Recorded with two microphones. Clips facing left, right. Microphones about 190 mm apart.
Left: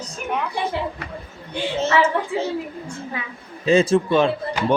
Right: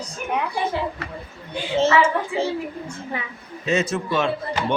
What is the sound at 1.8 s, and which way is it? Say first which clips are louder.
Speech: right 1 dB; 30° right (ahead or behind).